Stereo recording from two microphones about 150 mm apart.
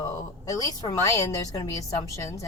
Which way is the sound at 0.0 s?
25° left (ahead or behind).